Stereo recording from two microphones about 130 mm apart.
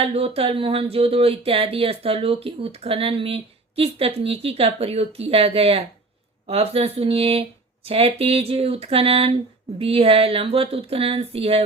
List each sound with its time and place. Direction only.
0.0 s speech: 50° right (ahead or behind)